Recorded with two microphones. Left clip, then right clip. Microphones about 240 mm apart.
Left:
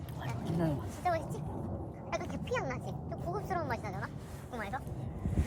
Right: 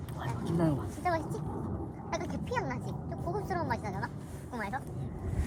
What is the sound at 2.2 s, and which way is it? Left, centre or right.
Speech, centre.